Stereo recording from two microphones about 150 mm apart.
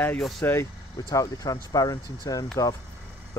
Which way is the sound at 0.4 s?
15° left (ahead or behind).